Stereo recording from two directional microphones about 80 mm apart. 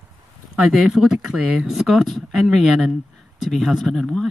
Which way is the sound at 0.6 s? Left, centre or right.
Centre.